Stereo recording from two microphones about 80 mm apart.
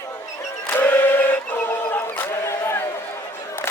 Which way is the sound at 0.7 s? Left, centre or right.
Left.